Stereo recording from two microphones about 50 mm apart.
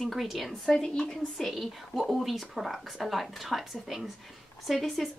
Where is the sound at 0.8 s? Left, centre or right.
Centre.